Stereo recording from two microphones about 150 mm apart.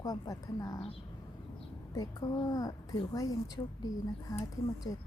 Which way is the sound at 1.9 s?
25° left (ahead or behind).